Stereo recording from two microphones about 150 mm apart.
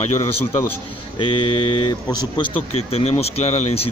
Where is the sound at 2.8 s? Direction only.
40° left (ahead or behind).